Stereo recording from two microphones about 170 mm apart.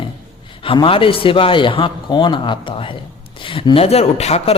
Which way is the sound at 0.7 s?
30° left (ahead or behind).